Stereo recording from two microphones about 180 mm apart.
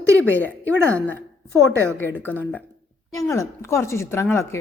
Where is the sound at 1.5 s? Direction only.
15° right (ahead or behind).